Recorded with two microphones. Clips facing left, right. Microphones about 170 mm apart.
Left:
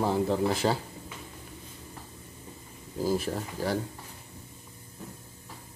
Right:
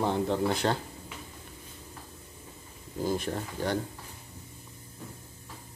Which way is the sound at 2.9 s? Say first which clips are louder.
Left 2 dB; 5° left (ahead or behind).